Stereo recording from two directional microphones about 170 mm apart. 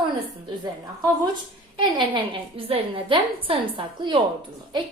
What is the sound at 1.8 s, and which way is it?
A woman's voice, 30° right (ahead or behind).